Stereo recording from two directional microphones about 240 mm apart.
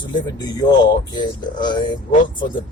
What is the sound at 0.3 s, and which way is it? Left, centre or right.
Speech, centre.